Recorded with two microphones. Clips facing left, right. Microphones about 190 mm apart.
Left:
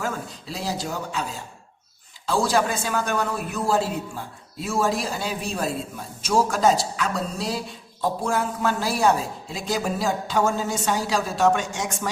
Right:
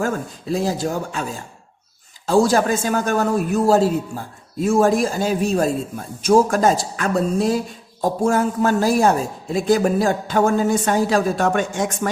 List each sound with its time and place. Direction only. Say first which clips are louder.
0.0 s speech: right 7 dB; 50° right (ahead or behind)